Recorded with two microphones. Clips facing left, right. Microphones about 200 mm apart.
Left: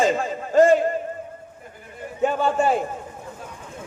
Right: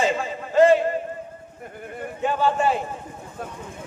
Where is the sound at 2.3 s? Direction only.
45° left (ahead or behind).